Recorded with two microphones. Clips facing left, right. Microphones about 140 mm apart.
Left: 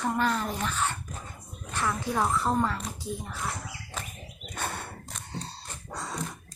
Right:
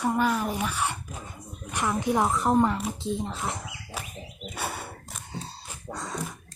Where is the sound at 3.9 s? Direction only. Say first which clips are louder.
Right 1 dB; 10° right (ahead or behind).